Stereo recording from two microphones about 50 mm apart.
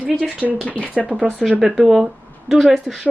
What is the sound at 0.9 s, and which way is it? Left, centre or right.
Speech, right.